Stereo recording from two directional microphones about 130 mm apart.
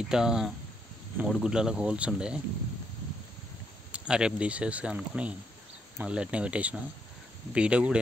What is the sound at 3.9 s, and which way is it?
Speech, 5° right (ahead or behind).